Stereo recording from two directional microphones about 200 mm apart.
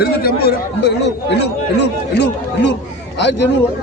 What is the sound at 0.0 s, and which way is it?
Speech, 50° left (ahead or behind).